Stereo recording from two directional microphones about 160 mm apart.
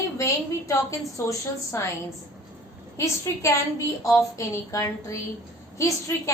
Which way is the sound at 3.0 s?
20° left (ahead or behind).